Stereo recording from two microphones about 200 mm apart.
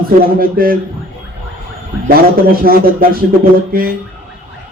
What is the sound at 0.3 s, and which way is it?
Speech, 45° right (ahead or behind).